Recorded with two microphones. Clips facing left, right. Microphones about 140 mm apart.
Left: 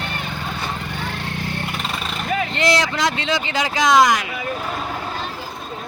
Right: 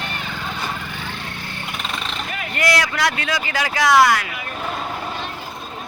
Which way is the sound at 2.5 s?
25° left (ahead or behind).